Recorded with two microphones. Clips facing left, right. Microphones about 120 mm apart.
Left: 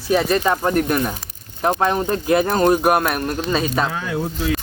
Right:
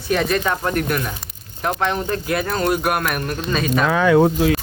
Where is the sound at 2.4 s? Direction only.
40° left (ahead or behind).